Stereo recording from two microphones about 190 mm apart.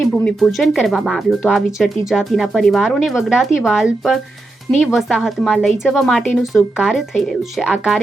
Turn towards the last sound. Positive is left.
turn(degrees=0)  # may be behind; listen again after turning